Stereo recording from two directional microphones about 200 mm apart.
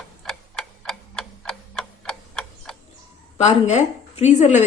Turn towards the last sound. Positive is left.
turn(degrees=35)  # may be behind; listen again after turning